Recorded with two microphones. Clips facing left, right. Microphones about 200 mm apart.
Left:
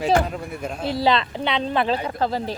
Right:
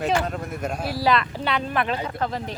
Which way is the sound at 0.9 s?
25° left (ahead or behind).